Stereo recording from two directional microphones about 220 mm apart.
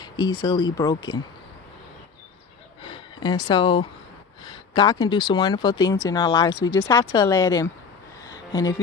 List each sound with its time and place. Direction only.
0.0 s speech: 20° left (ahead or behind)
2.8 s speech: 20° left (ahead or behind)
8.2 s music: 15° left (ahead or behind)